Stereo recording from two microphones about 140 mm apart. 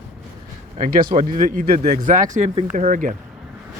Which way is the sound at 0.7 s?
80° right.